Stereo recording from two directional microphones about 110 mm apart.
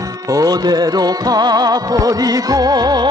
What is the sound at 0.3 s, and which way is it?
Music, 35° right (ahead or behind).